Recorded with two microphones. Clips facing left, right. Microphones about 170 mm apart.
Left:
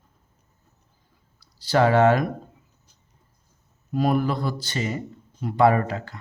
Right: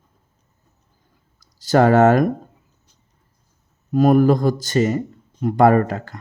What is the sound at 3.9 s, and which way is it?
Speech, 45° right (ahead or behind).